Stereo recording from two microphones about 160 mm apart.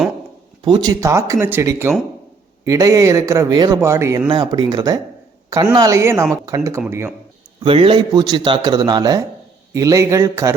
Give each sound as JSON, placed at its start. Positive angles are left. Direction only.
{"t": 0.6, "sound": "a man's voice", "side_deg": -25}
{"t": 4.3, "sound": "a man's voice", "side_deg": -30}
{"t": 7.6, "sound": "a man's voice", "side_deg": -35}